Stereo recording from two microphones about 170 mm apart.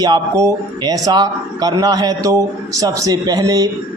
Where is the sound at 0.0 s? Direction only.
20° right (ahead or behind).